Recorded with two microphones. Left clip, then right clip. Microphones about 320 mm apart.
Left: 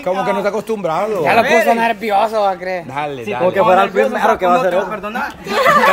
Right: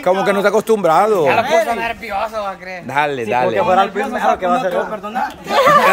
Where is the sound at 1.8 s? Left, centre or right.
Left.